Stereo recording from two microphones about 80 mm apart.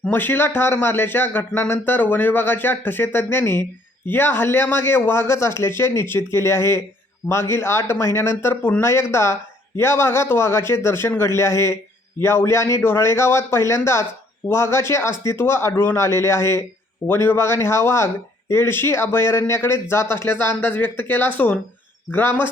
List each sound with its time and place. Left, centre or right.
0.1 s a man's voice: left